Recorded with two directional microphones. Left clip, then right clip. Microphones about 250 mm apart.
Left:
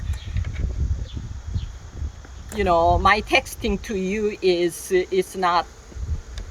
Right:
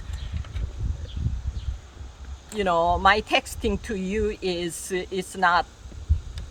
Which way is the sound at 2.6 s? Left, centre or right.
Centre.